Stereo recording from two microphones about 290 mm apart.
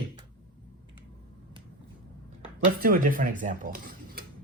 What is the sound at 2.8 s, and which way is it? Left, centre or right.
Speech, right.